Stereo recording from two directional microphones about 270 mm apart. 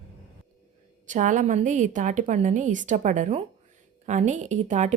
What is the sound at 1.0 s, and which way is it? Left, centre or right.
A woman's voice, right.